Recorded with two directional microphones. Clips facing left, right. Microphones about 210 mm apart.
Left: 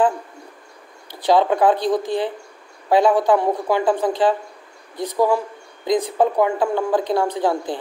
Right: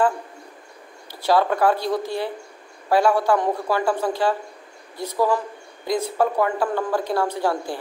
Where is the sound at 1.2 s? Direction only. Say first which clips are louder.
Left 3 dB; 20° left (ahead or behind).